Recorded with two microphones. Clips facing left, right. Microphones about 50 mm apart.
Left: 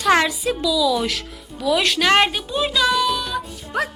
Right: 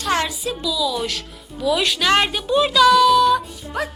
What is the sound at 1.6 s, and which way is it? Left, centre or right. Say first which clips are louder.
Speech: left 1 dB; left.